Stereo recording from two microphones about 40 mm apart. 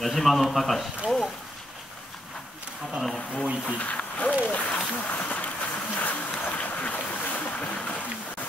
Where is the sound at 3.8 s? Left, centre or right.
Left.